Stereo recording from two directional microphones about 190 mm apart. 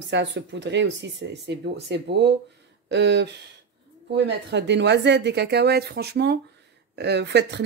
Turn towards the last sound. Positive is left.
turn(degrees=-65)  # may be behind; listen again after turning